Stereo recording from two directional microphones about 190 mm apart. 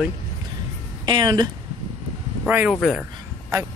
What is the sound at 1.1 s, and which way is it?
Speech, 20° right (ahead or behind).